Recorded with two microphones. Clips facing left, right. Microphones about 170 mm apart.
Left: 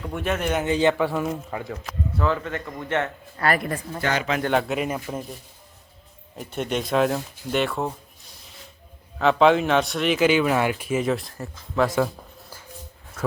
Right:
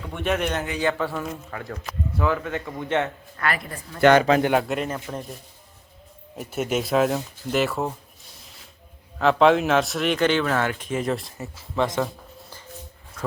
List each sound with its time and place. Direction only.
0.0 s a man's voice: 5° left (ahead or behind)
0.6 s a man's voice: 25° left (ahead or behind)
0.9 s a man's voice: 15° left (ahead or behind)
1.9 s speech: 10° right (ahead or behind)
3.3 s speech: 40° left (ahead or behind)
4.2 s speech: 35° right (ahead or behind)
4.5 s speech: centre (ahead or behind)
4.9 s a man's voice: 10° left (ahead or behind)
6.3 s speech: 5° right (ahead or behind)
9.1 s speech: centre (ahead or behind)
11.8 s a sound: 5° left (ahead or behind)